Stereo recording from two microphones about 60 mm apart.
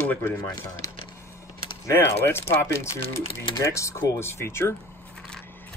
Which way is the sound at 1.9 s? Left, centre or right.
Left.